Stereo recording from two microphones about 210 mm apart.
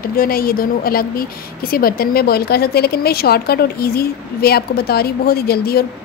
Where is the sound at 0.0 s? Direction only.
45° left (ahead or behind).